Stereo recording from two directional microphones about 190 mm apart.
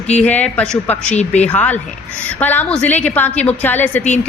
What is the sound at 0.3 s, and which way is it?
Speech, 10° left (ahead or behind).